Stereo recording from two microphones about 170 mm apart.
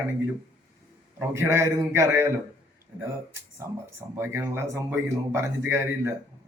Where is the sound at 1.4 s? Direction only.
15° right (ahead or behind).